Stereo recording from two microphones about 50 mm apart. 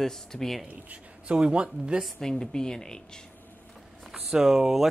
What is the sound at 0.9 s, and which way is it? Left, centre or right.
Speech, right.